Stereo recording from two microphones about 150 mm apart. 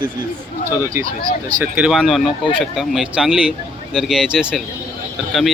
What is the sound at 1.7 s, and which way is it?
Speech, 5° right (ahead or behind).